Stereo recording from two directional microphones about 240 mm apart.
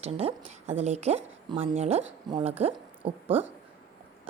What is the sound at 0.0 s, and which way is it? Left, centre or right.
Speech, right.